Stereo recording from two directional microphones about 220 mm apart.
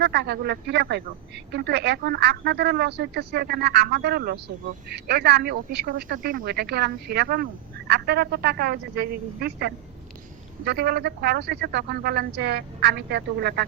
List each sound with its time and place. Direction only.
0.0 s speech: 50° right (ahead or behind)